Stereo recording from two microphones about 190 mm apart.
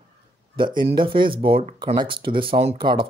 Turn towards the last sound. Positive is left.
turn(degrees=-25)  # may be behind; listen again after turning